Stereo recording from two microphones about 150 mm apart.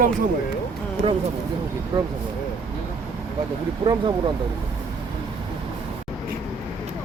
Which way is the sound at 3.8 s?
30° right (ahead or behind).